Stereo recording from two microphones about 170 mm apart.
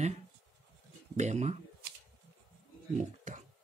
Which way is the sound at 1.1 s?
45° right (ahead or behind).